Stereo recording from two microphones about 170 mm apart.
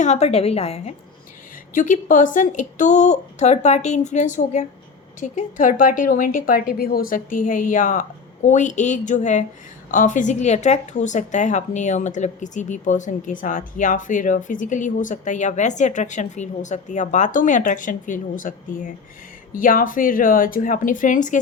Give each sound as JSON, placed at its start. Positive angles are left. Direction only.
{"t": 0.0, "sound": "a woman's voice", "side_deg": 40}
{"t": 1.7, "sound": "a woman's voice", "side_deg": 50}